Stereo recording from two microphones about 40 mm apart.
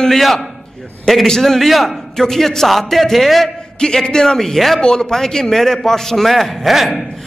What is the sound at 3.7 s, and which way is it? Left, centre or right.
A man's voice, centre.